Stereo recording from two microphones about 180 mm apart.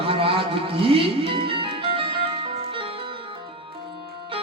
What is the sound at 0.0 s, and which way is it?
Music, 30° right (ahead or behind).